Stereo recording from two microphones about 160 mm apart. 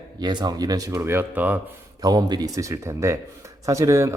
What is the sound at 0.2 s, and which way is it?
Speech, 25° right (ahead or behind).